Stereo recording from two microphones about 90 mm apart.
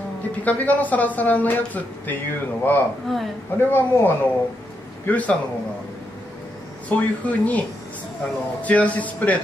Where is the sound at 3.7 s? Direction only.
25° left (ahead or behind).